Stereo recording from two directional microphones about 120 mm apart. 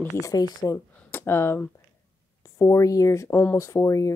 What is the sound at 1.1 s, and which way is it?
Speech, 20° left (ahead or behind).